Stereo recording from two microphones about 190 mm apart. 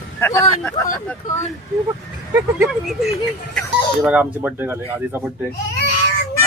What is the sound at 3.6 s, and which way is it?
Speech, centre (ahead or behind).